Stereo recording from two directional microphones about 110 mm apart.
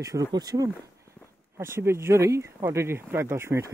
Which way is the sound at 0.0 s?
30° right (ahead or behind).